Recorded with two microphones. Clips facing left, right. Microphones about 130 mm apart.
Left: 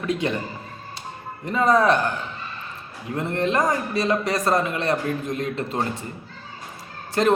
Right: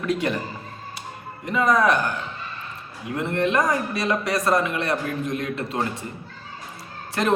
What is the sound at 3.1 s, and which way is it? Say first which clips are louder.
A man's voice: even; 35° left (ahead or behind).